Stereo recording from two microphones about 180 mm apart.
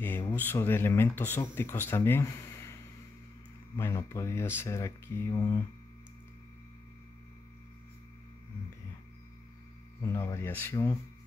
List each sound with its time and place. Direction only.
0.0 s speech: 10° left (ahead or behind)
3.7 s speech: 15° left (ahead or behind)
10.0 s speech: 15° left (ahead or behind)